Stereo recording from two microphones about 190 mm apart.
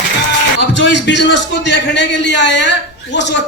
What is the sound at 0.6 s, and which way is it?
A man's voice, 70° left (ahead or behind).